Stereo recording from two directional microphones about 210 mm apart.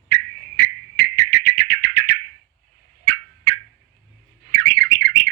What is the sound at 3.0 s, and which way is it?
Turkey, 55° right (ahead or behind).